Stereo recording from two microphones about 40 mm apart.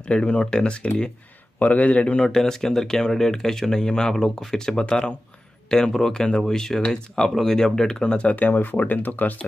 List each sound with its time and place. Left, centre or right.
0.0 s a man's voice: left
2.3 s speech: centre
8.0 s speech: left
8.4 s speech: left